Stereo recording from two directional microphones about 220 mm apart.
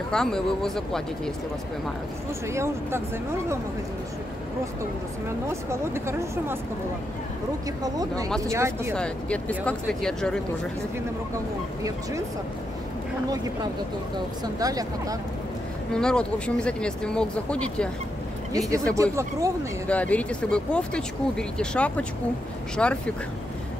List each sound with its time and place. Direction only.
0.1 s speech: centre (ahead or behind)
2.5 s speech: 10° right (ahead or behind)
5.5 s speech: 10° right (ahead or behind)
8.5 s speech: 10° right (ahead or behind)
8.9 s speech: 5° left (ahead or behind)
14.4 s speech: 15° right (ahead or behind)
15.9 s speech: 5° left (ahead or behind)
18.5 s speech: 15° right (ahead or behind)
19.9 s speech: 5° left (ahead or behind)